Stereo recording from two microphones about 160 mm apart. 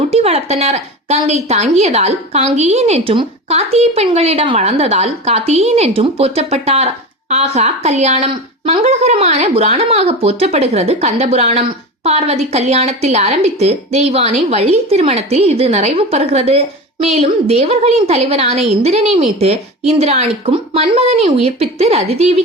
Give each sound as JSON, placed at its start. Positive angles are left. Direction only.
{"t": 0.1, "sound": "a woman's voice", "side_deg": -40}